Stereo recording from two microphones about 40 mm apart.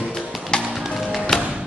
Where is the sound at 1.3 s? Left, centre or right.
Centre.